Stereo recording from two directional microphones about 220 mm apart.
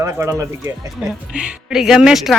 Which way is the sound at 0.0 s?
15° right (ahead or behind).